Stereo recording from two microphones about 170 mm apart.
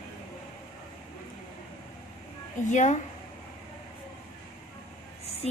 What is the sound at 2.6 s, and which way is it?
Speech, 45° left (ahead or behind).